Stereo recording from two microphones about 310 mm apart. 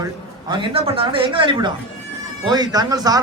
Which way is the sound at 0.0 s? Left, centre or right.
Centre.